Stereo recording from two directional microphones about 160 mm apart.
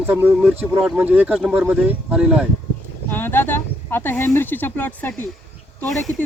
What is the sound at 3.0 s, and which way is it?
Speech, 15° left (ahead or behind).